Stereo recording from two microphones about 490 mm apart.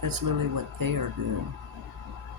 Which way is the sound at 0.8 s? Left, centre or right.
Right.